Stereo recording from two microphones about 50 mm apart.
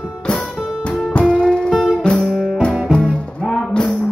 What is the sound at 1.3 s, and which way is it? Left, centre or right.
Music, left.